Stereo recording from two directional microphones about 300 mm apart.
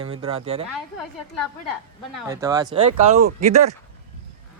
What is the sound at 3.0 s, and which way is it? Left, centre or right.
Speech, right.